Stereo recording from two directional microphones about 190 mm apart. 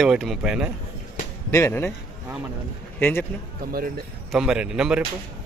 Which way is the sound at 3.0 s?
10° left (ahead or behind).